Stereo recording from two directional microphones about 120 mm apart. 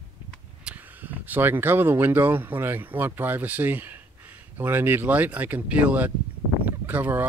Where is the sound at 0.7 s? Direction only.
15° right (ahead or behind).